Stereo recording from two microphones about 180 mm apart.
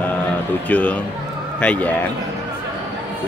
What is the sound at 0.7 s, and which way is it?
Speech, 10° left (ahead or behind).